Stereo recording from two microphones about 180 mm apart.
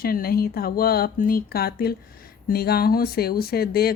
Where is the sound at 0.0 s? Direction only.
55° left (ahead or behind).